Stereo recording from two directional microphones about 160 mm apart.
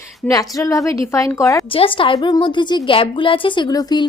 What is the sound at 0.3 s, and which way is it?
A woman's voice, 20° left (ahead or behind).